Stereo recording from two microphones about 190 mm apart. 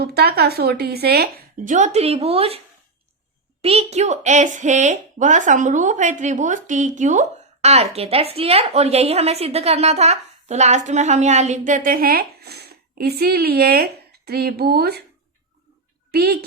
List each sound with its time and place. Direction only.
0.0 s a woman's voice: 60° right (ahead or behind); by 2.6 s 30° right (ahead or behind)
3.6 s a woman's voice: 35° right (ahead or behind); by 15.0 s 55° right (ahead or behind)
16.1 s a woman's voice: 55° right (ahead or behind)